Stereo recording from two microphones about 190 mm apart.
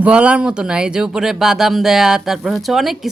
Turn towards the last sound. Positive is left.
turn(degrees=0)  # may be behind; listen again after turning